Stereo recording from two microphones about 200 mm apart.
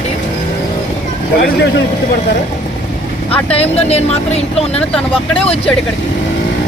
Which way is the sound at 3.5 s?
30° left (ahead or behind).